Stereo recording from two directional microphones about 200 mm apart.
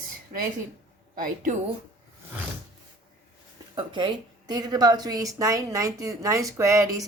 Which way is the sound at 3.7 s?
25° right (ahead or behind).